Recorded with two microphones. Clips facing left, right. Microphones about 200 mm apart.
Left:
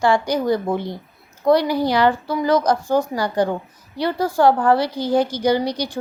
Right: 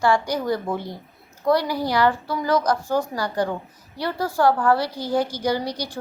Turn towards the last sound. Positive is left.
turn(degrees=20)  # may be behind; listen again after turning